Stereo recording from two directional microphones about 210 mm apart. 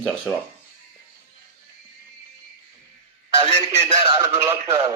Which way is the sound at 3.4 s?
30° right (ahead or behind).